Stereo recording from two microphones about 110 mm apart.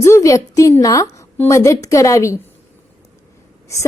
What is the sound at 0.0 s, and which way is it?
A woman's voice, 25° left (ahead or behind).